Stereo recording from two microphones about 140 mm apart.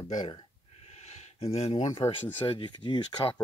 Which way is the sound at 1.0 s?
50° left (ahead or behind).